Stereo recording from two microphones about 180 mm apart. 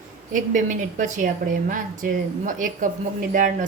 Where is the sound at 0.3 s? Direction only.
45° right (ahead or behind).